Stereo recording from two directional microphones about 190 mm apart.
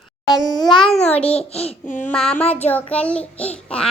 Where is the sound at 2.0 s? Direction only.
5° left (ahead or behind).